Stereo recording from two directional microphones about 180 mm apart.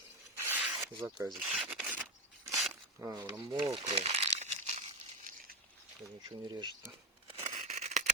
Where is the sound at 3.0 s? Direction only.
20° right (ahead or behind); by 5.3 s 40° right (ahead or behind).